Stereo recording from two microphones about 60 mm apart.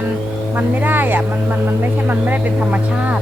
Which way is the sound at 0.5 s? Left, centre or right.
Right.